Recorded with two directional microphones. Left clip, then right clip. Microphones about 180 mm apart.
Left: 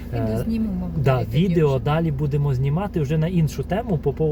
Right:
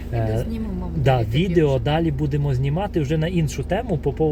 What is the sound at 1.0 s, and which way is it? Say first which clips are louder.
Speech: right 2 dB; 25° right (ahead or behind).